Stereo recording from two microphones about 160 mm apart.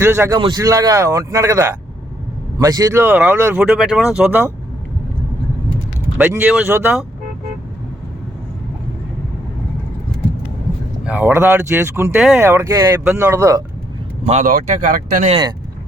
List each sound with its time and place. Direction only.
0.0 s speech: 15° right (ahead or behind)
6.1 s speech: 10° right (ahead or behind)
11.0 s speech: 10° right (ahead or behind)
14.3 s speech: 50° right (ahead or behind)
15.3 s speech: 30° right (ahead or behind)